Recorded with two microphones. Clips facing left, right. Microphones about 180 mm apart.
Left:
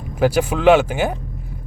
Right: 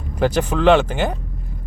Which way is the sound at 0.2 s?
10° left (ahead or behind).